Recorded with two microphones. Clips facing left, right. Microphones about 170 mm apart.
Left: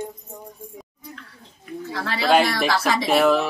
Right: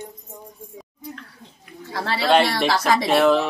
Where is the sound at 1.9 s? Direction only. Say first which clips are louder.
Right 1 dB; 30° right (ahead or behind).